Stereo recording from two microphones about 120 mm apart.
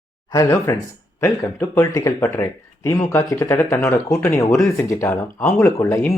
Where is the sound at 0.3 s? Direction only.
30° left (ahead or behind).